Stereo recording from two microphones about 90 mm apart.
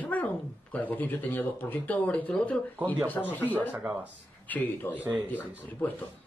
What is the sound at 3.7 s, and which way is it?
Speech, 20° right (ahead or behind).